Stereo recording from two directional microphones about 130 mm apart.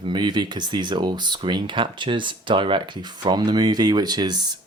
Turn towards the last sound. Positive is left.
turn(degrees=-35)  # may be behind; listen again after turning